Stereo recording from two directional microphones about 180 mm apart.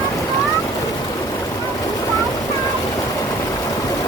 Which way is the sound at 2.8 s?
20° left (ahead or behind).